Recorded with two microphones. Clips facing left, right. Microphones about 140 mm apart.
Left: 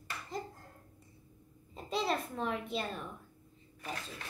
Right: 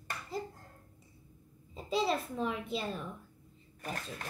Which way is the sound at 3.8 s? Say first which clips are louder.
Right 2 dB; 45° right (ahead or behind).